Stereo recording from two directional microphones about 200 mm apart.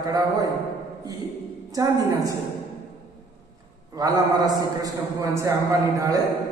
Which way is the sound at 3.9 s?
20° right (ahead or behind).